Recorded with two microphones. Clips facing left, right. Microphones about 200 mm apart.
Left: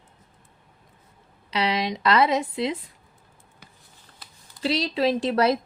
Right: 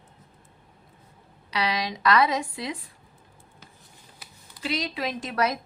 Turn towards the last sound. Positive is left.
turn(degrees=30)  # may be behind; listen again after turning